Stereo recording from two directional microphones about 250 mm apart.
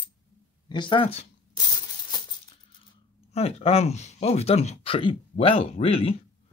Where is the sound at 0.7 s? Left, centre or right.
Centre.